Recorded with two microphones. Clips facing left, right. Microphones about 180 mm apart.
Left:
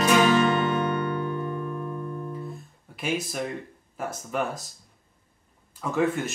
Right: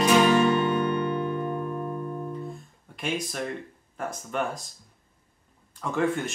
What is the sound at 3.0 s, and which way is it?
Speech, 5° left (ahead or behind).